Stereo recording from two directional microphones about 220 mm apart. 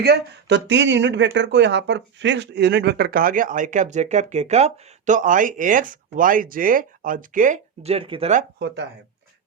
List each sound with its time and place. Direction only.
0.0 s speech: 50° right (ahead or behind); by 8.4 s 30° right (ahead or behind)
8.5 s speech: 50° right (ahead or behind)